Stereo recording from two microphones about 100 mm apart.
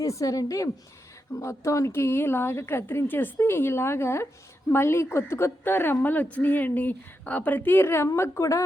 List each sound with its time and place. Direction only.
0.0 s a woman's voice: 30° left (ahead or behind)